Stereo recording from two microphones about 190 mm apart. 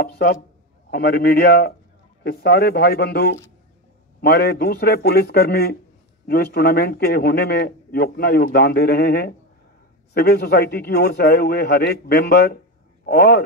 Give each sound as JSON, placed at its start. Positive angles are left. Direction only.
{"t": 0.0, "sound": "a man's voice", "side_deg": 60}